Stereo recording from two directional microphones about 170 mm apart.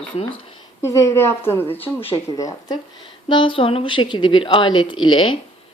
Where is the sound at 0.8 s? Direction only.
15° left (ahead or behind).